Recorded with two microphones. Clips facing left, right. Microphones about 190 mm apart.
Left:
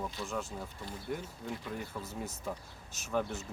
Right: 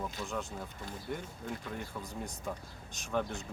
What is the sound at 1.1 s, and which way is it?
Speech, centre (ahead or behind).